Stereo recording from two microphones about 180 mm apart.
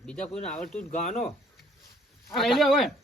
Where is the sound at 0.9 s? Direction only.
45° left (ahead or behind).